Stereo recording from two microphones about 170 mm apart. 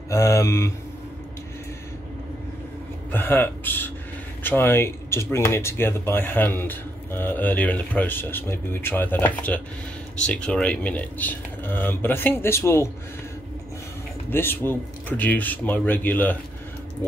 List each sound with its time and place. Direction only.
0.1 s speech: 15° left (ahead or behind)
3.1 s speech: 10° left (ahead or behind)
14.3 s speech: 15° left (ahead or behind)